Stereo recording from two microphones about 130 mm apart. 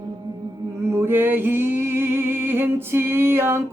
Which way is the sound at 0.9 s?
20° right (ahead or behind).